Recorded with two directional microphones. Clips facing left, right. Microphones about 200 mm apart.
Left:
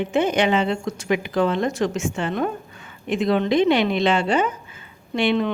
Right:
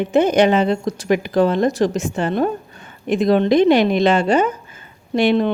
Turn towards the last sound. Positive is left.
turn(degrees=-40)  # may be behind; listen again after turning